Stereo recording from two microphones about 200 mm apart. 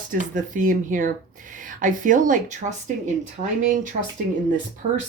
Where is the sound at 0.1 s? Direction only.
40° right (ahead or behind).